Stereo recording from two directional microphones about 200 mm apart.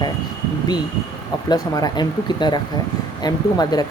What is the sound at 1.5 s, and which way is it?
Speech, 20° left (ahead or behind).